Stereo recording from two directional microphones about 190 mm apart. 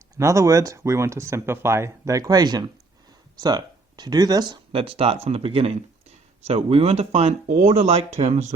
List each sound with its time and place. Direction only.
0.2 s speech: 15° right (ahead or behind); by 8.5 s 35° right (ahead or behind)